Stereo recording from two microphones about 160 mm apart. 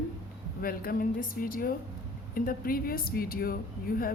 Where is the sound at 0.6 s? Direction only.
65° left (ahead or behind).